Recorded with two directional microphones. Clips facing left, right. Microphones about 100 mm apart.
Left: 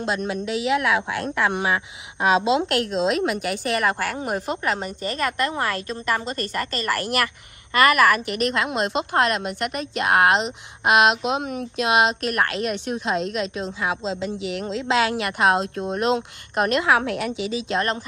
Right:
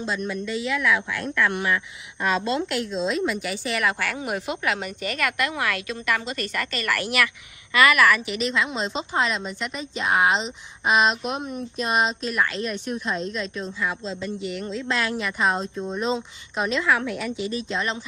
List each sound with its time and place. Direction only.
0.0 s a woman's voice: 70° left (ahead or behind)
2.7 s a woman's voice: 70° left (ahead or behind)
17.4 s speech: 90° left
17.7 s speech: 50° left (ahead or behind)